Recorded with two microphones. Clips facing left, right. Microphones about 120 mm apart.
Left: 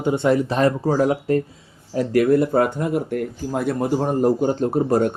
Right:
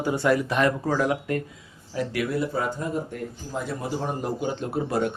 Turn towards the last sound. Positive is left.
turn(degrees=45)  # may be behind; listen again after turning